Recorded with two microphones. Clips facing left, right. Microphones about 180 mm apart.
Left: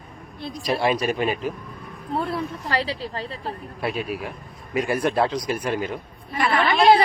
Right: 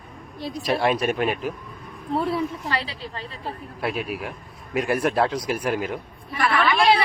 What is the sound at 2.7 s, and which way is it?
Speech, 35° left (ahead or behind).